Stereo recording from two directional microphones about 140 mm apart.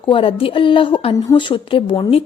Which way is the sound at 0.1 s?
40° left (ahead or behind).